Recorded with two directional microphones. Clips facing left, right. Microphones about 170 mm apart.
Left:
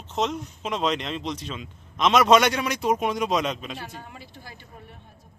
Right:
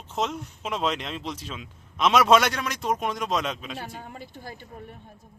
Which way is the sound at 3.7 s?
45° right (ahead or behind).